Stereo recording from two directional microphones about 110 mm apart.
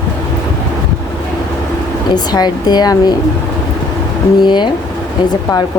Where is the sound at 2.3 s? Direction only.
40° left (ahead or behind).